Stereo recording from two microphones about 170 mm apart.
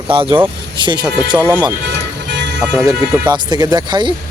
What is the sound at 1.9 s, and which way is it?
Music, 90° right.